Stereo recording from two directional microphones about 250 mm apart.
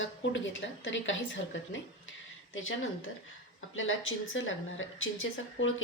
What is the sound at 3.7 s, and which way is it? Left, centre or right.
Speech, left.